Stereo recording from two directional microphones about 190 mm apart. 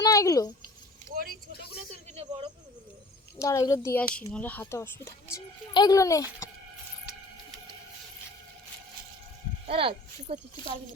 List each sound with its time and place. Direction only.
0.0 s speech: 15° left (ahead or behind)
1.1 s vehicle: 50° right (ahead or behind)
3.3 s speech: 15° left (ahead or behind)
9.6 s speech: 30° right (ahead or behind)